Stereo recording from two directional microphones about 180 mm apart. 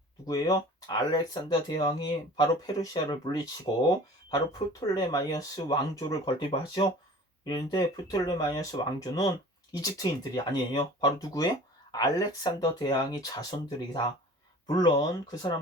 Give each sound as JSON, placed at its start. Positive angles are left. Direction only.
{"t": 0.3, "sound": "speech", "side_deg": 20}